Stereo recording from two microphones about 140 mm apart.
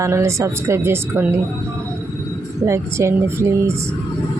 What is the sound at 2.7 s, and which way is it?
A woman's voice, 20° right (ahead or behind).